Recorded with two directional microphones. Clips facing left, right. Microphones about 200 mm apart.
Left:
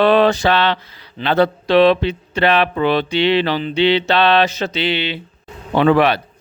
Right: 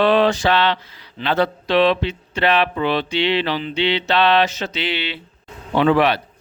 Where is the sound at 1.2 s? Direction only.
60° left (ahead or behind).